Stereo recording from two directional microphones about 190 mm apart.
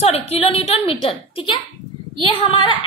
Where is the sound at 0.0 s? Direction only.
35° left (ahead or behind).